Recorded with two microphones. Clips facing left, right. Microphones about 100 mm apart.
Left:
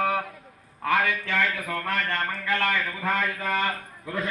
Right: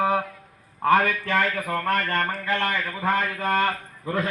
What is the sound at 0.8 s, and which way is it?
A man's voice, 40° right (ahead or behind).